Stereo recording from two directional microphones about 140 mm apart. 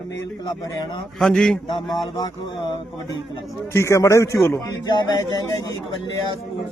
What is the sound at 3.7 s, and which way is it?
Speech, 20° left (ahead or behind).